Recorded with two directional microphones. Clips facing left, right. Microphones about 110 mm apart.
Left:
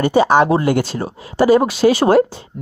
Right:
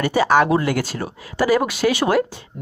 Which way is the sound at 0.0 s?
25° left (ahead or behind).